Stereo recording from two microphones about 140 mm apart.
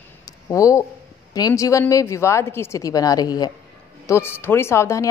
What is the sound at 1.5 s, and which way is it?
A woman's voice, 20° left (ahead or behind).